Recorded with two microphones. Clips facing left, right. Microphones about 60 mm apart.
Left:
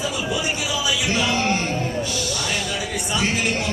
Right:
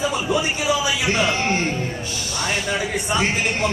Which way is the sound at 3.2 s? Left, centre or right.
Right.